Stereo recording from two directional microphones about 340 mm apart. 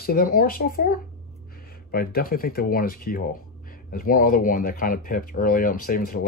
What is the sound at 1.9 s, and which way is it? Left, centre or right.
Speech, left.